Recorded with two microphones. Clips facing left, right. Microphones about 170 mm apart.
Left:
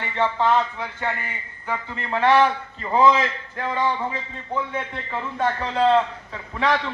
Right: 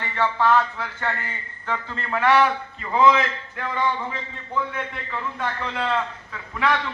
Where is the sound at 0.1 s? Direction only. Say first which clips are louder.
Even; 20° left (ahead or behind).